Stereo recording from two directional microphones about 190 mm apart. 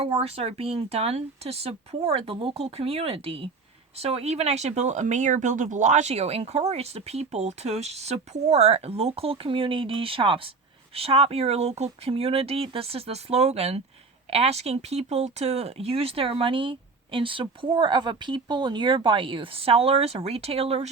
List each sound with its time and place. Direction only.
0.0 s speech: 30° right (ahead or behind)